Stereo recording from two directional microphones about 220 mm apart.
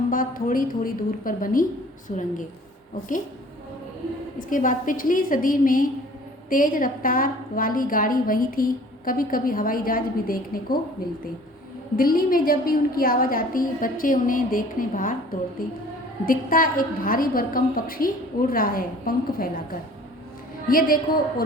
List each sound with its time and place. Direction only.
0.1 s a woman's voice: 40° left (ahead or behind)
4.4 s a woman's voice: 35° left (ahead or behind)
11.9 s a woman's voice: 40° left (ahead or behind)
20.7 s a woman's voice: 40° left (ahead or behind)